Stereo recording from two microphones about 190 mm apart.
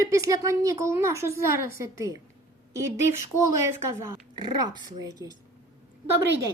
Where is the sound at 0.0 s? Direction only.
15° right (ahead or behind).